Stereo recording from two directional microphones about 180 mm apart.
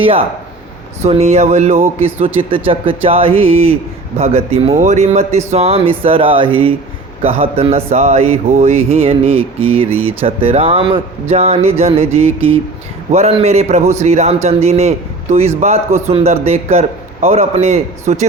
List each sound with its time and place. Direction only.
1.0 s speech: 35° right (ahead or behind)